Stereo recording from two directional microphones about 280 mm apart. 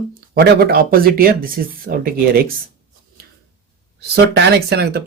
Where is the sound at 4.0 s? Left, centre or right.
Right.